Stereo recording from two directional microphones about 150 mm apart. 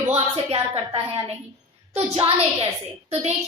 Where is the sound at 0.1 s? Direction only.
35° right (ahead or behind).